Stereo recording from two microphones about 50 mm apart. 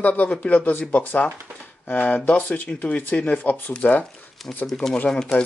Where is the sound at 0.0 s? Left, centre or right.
Left.